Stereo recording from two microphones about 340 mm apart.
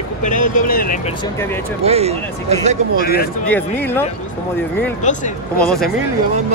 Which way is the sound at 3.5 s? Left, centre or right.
Centre.